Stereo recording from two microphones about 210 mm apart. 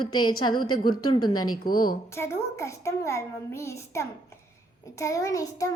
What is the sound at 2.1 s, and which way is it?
Speech, 10° left (ahead or behind).